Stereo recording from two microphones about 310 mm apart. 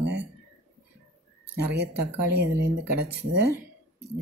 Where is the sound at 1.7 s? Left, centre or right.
Right.